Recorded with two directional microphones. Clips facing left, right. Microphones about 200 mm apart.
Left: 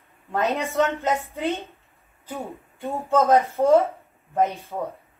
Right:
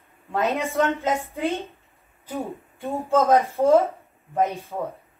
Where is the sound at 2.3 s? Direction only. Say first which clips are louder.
Right 3 dB; centre (ahead or behind).